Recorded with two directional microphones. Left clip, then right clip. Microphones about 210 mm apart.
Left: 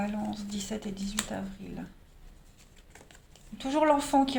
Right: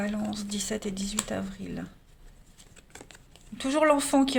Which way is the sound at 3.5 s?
50° right (ahead or behind).